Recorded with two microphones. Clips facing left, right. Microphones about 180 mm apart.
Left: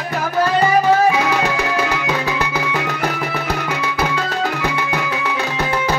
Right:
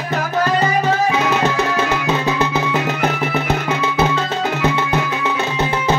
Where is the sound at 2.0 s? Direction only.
25° right (ahead or behind).